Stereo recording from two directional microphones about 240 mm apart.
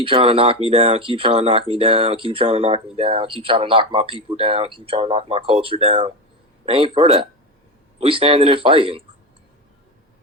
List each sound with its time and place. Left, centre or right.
0.0 s speech: right